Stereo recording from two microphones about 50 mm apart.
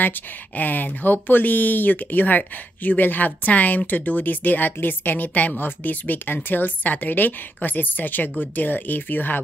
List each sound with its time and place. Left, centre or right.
0.0 s speech: left